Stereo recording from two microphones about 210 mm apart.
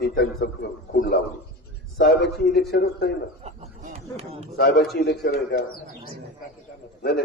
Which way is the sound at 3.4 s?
30° right (ahead or behind).